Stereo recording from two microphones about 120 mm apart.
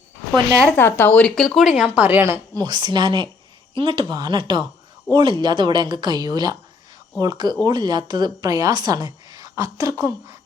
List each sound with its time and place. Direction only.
0.8 s speech: 20° left (ahead or behind); by 2.4 s 20° right (ahead or behind)
2.6 s a woman's voice: 35° right (ahead or behind)